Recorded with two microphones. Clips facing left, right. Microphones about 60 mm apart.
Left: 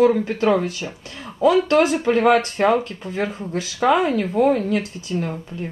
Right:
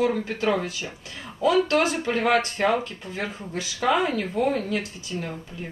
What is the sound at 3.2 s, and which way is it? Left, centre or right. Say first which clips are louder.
Speech: left 6 dB; centre.